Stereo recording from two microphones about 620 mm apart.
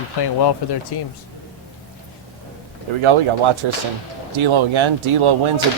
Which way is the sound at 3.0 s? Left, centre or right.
Right.